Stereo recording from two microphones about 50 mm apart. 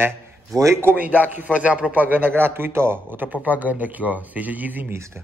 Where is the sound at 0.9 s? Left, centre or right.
Right.